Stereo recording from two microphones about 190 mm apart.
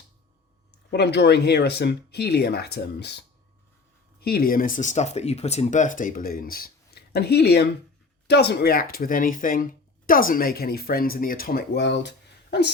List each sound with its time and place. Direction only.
0.9 s speech: 60° left (ahead or behind)